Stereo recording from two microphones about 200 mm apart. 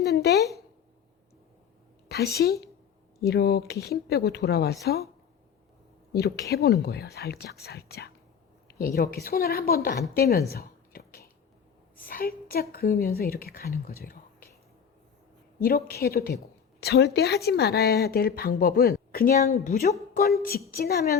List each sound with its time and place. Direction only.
0.0 s speech: 55° left (ahead or behind)
2.0 s a woman's voice: 55° left (ahead or behind)
6.1 s a woman's voice: 55° left (ahead or behind)
10.5 s whispering: 50° left (ahead or behind)
11.9 s a woman's voice: 45° left (ahead or behind)
15.6 s a woman's voice: 50° left (ahead or behind)
19.5 s a woman's voice: 35° left (ahead or behind)